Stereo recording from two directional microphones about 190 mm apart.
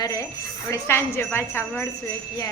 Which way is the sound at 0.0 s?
15° left (ahead or behind).